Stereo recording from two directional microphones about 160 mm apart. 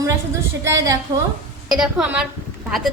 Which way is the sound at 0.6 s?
20° right (ahead or behind).